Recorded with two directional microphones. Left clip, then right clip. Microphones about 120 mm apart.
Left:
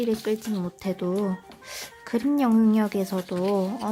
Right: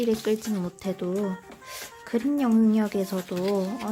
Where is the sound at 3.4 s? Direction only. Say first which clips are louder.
Left 2 dB; 25° left (ahead or behind).